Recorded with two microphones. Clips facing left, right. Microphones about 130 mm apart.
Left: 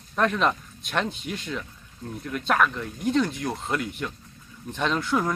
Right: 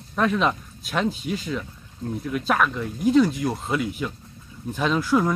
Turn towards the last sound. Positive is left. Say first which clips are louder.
# right 4 dB
turn(degrees=0)  # may be behind; listen again after turning